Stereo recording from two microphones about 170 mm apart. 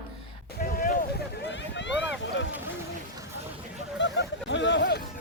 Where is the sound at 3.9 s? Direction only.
90° left.